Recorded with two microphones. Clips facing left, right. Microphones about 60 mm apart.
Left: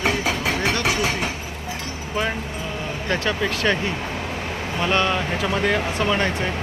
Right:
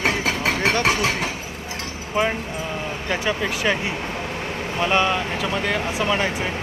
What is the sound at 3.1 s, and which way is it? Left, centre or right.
Speech, centre.